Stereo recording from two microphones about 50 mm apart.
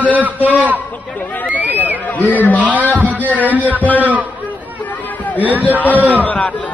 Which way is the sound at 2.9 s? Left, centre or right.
Right.